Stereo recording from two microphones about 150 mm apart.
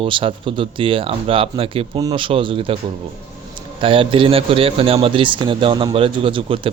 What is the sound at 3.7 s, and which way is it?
Speech, 35° right (ahead or behind).